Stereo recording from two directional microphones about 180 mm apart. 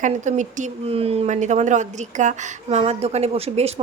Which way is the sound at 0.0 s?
45° right (ahead or behind).